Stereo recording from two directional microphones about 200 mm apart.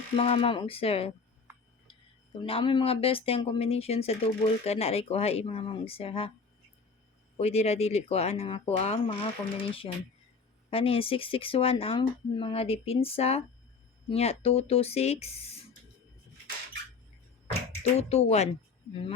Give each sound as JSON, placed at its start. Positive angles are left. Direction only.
{"t": 0.2, "sound": "speech", "side_deg": 25}
{"t": 2.4, "sound": "speech", "side_deg": 25}
{"t": 7.3, "sound": "speech", "side_deg": 30}
{"t": 17.9, "sound": "speech", "side_deg": 30}